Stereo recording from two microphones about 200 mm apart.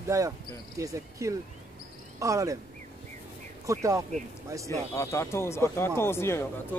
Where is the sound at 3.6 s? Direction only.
15° right (ahead or behind).